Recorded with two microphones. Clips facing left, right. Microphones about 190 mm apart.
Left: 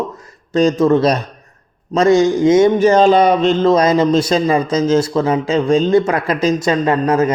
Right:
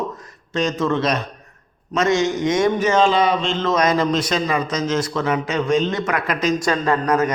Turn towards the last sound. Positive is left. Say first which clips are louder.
# left 4 dB
turn(degrees=25)  # may be behind; listen again after turning